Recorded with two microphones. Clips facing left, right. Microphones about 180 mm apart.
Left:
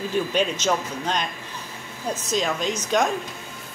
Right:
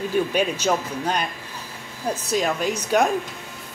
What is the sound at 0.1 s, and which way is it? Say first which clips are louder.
A woman's voice: right 1 dB; 10° right (ahead or behind).